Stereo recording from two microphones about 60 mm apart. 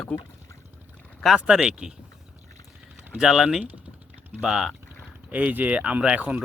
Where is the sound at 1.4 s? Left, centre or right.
Centre.